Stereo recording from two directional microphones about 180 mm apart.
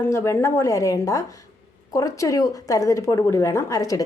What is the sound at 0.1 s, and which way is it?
A woman's voice, 15° left (ahead or behind).